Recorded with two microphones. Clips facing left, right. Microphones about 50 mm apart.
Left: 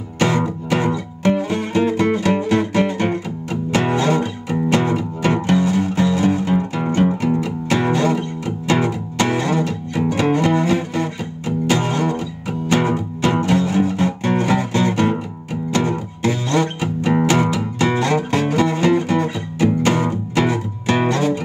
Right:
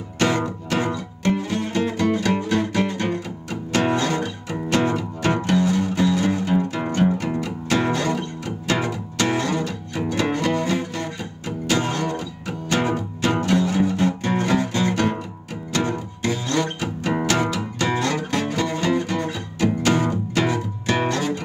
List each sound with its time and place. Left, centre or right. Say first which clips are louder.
0.2 s music: left 3 dB; centre